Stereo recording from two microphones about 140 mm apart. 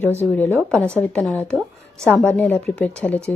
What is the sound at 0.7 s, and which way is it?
A woman's voice, 10° left (ahead or behind).